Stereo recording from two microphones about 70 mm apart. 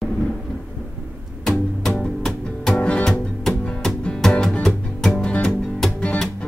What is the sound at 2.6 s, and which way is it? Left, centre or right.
Music, centre.